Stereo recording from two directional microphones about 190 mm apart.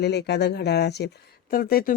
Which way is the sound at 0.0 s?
60° left (ahead or behind).